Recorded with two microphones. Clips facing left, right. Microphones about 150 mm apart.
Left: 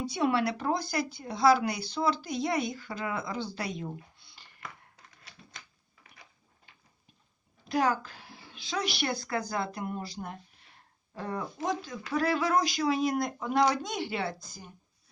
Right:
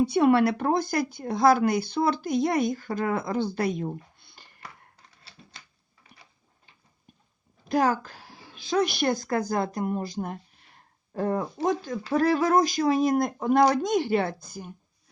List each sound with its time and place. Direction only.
0.0 s speech: 55° right (ahead or behind)
4.2 s a sound: 55° right (ahead or behind)
5.2 s typewriter: 30° right (ahead or behind)
7.7 s speech: 45° right (ahead or behind)